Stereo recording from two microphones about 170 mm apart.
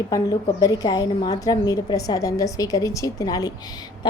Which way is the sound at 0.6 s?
20° left (ahead or behind).